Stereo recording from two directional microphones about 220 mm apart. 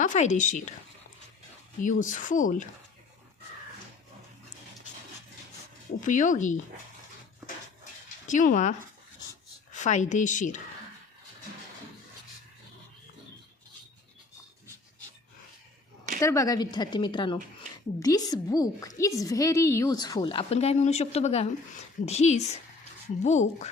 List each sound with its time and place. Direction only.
0.0 s a woman's voice: 35° left (ahead or behind)
1.8 s a woman's voice: 35° left (ahead or behind)
6.0 s a woman's voice: 35° left (ahead or behind)
8.3 s a woman's voice: 35° left (ahead or behind)
9.7 s a woman's voice: 35° left (ahead or behind)
16.2 s a woman's voice: 15° left (ahead or behind); by 23.6 s 30° left (ahead or behind)